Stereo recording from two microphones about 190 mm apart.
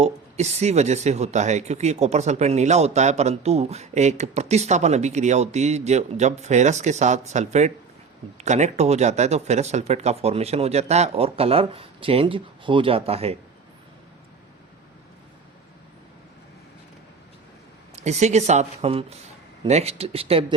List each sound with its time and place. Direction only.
0.0 s speech: 35° right (ahead or behind)
17.9 s speech: 35° right (ahead or behind)